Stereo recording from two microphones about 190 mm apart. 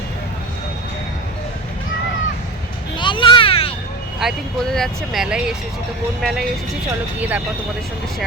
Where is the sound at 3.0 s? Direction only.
25° left (ahead or behind).